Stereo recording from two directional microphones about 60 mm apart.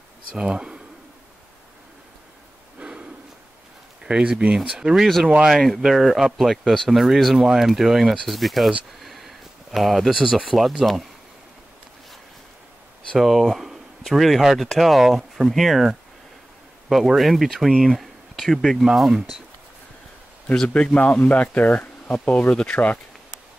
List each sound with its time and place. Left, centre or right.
0.3 s speech: centre
2.8 s a sound: centre
4.0 s speech: centre
4.6 s speech: centre
5.5 s speech: centre
13.2 s speech: centre
20.5 s speech: centre